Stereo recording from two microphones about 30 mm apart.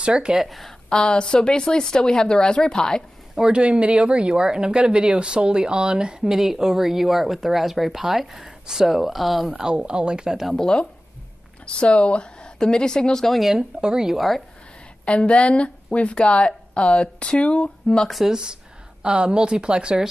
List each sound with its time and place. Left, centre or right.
0.0 s speech: right
0.5 s speech: centre
0.8 s speech: left
3.5 s speech: right
6.3 s speech: centre
8.8 s speech: centre
9.8 s speech: right
10.5 s speech: left
13.3 s speech: centre
13.6 s speech: right
15.0 s a woman's voice: left
18.0 s speech: centre
18.3 s speech: right